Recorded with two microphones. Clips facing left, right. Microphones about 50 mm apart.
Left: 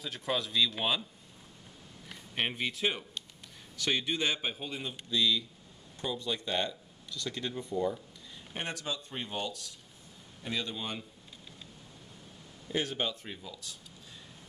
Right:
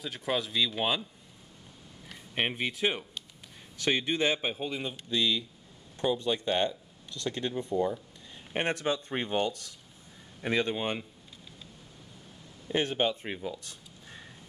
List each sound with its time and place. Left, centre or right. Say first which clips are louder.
0.0 s speech: right 2 dB; centre
2.3 s speech: right 2 dB; centre
5.1 s speech: even; right
8.5 s speech: right 8 dB; right
12.7 s speech: right 5 dB; right
13.3 s a sound: right 7 dB; right